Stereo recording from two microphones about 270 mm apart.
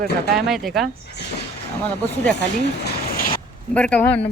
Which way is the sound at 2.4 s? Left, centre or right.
Left.